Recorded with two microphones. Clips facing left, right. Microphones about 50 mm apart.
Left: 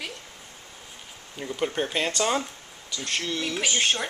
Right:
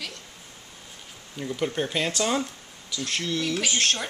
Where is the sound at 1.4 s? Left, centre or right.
Centre.